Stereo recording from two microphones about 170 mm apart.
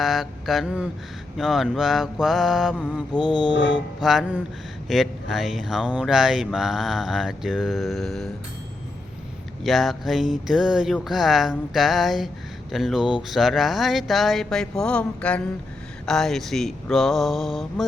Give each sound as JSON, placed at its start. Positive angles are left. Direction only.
{"t": 0.0, "sound": "speech", "side_deg": 0}
{"t": 3.5, "sound": "mantra", "side_deg": 90}
{"t": 4.0, "sound": "speech", "side_deg": 0}
{"t": 9.6, "sound": "speech", "side_deg": 0}